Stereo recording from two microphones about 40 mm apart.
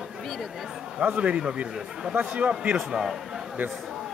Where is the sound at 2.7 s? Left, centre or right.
Centre.